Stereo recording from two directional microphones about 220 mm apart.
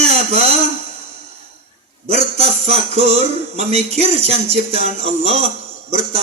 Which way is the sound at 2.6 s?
30° right (ahead or behind).